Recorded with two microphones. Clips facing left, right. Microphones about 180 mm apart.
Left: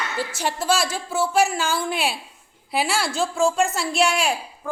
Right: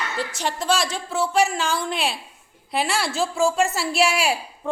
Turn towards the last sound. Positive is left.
turn(degrees=-5)  # may be behind; listen again after turning